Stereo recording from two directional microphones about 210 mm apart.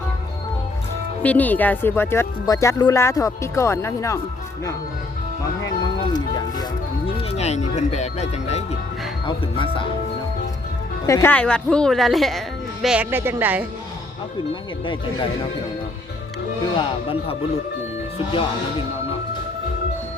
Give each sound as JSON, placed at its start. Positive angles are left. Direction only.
{"t": 1.2, "sound": "speech", "side_deg": 10}
{"t": 5.8, "sound": "speech", "side_deg": 20}
{"t": 11.0, "sound": "a woman's voice", "side_deg": 15}
{"t": 16.7, "sound": "speech", "side_deg": 25}